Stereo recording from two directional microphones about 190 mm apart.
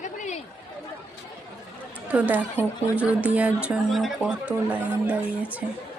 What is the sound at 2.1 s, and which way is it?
Speech, 10° right (ahead or behind).